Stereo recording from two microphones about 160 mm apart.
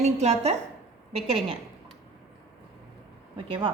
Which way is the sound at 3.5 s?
35° right (ahead or behind).